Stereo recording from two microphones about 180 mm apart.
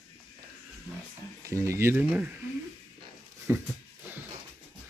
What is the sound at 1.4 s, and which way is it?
Speech, 15° right (ahead or behind).